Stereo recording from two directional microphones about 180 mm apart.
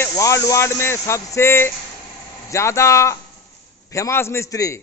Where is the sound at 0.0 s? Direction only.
15° left (ahead or behind).